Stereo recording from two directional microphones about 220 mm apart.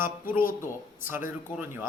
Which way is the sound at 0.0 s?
10° right (ahead or behind).